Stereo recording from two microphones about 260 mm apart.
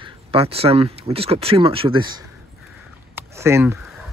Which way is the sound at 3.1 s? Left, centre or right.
Centre.